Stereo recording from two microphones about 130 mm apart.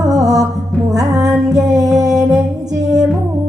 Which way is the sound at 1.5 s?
25° right (ahead or behind).